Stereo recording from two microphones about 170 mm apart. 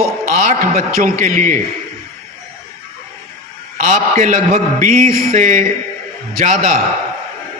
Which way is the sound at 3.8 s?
50° right (ahead or behind).